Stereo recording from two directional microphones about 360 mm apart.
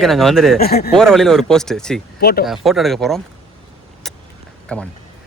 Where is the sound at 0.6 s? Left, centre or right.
Left.